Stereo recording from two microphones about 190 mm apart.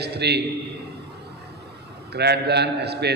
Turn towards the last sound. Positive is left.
turn(degrees=-60)  # may be behind; listen again after turning